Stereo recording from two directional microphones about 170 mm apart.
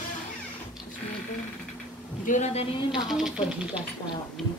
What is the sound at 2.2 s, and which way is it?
Speech, 45° left (ahead or behind).